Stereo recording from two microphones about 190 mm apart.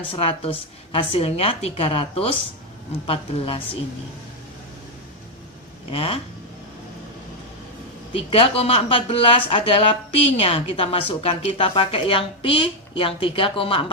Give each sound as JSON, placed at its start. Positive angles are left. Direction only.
{"t": 0.1, "sound": "a woman's voice", "side_deg": 30}
{"t": 5.9, "sound": "speech", "side_deg": 30}
{"t": 8.3, "sound": "speech", "side_deg": 30}